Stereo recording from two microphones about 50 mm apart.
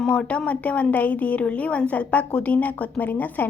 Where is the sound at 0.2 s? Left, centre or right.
Left.